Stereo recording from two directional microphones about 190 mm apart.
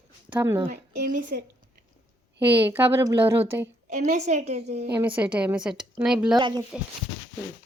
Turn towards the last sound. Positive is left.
turn(degrees=-25)  # may be behind; listen again after turning